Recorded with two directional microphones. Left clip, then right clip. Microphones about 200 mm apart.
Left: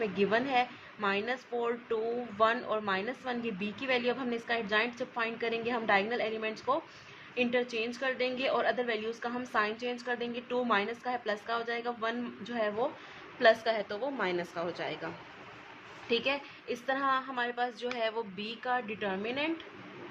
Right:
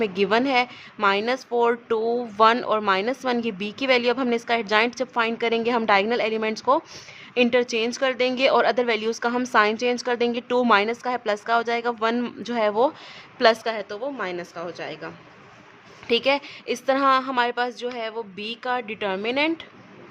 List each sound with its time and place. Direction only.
0.0 s a woman's voice: 40° right (ahead or behind)
13.4 s a woman's voice: 30° right (ahead or behind)
16.0 s a woman's voice: 35° right (ahead or behind)